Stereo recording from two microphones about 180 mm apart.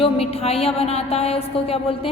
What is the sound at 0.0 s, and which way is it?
A woman's voice, 35° left (ahead or behind).